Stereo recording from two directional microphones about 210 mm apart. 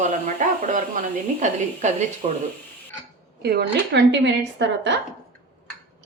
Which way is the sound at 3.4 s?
50° right (ahead or behind).